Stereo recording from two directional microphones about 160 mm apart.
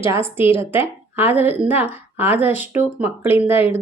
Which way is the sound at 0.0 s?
15° right (ahead or behind).